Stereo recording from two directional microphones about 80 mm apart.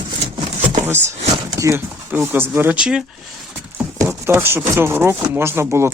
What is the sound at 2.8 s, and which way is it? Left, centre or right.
Speech, centre.